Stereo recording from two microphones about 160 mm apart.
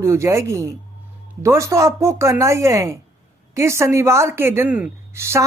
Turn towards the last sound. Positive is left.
turn(degrees=-15)  # may be behind; listen again after turning